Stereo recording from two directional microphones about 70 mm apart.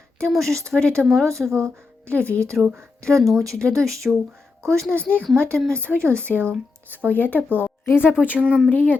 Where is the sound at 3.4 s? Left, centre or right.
Right.